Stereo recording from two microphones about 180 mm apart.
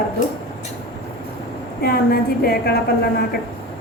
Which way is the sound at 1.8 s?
60° left (ahead or behind).